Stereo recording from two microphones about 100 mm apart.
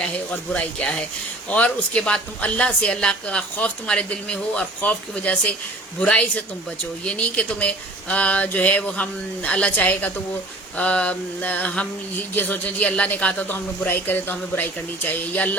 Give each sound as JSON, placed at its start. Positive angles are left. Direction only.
{"t": 0.0, "sound": "a woman's voice", "side_deg": 10}